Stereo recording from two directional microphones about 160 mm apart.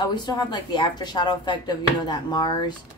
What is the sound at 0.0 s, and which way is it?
Speech, 25° left (ahead or behind).